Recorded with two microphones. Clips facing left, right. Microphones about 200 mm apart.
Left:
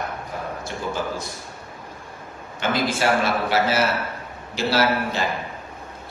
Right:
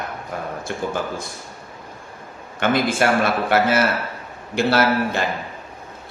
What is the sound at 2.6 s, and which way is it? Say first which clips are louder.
A man's voice: right 3 dB; 55° right (ahead or behind).